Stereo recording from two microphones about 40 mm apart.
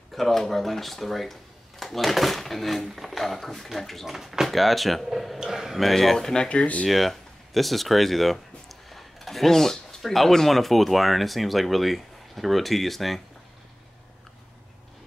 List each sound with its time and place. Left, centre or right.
0.1 s speech: centre
5.4 s a man's voice: centre
5.8 s speech: centre
6.1 s speech: centre
6.5 s speech: left
6.9 s speech: centre